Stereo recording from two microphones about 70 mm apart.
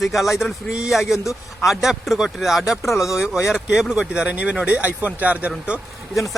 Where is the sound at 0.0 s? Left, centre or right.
Centre.